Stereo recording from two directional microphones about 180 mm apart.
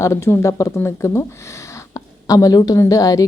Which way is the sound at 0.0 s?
15° left (ahead or behind).